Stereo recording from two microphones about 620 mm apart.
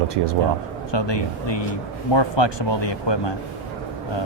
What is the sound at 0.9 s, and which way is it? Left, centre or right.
Speech, left.